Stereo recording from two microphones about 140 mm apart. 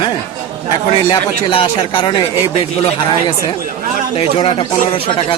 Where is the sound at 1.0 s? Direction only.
35° left (ahead or behind).